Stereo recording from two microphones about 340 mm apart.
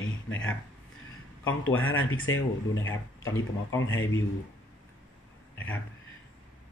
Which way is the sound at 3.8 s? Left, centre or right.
Left.